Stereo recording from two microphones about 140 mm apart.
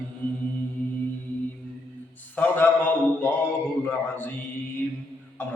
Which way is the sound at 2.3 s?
10° left (ahead or behind).